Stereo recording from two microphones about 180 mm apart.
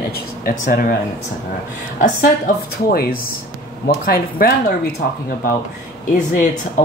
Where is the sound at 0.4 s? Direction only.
55° left (ahead or behind).